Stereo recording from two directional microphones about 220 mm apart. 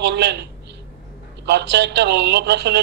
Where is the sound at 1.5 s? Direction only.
50° right (ahead or behind).